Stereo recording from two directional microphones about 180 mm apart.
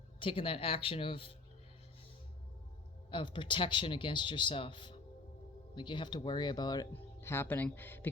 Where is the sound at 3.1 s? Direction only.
25° left (ahead or behind).